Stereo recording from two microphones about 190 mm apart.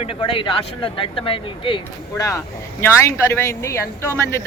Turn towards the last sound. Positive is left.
turn(degrees=15)  # may be behind; listen again after turning